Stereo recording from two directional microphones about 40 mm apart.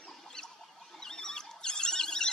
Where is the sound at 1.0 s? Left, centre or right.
Centre.